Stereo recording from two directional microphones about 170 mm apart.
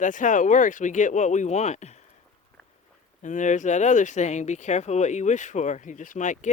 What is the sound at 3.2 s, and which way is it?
Speech, 45° left (ahead or behind).